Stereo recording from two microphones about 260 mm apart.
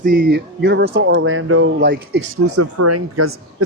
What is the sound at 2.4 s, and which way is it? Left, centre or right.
Speech, right.